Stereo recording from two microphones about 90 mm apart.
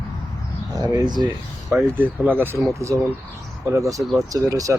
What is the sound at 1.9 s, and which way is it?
Speech, 20° right (ahead or behind).